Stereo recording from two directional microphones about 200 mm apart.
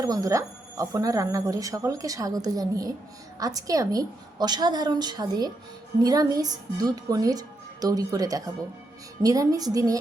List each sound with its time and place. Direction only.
0.0 s a woman's voice: 15° right (ahead or behind)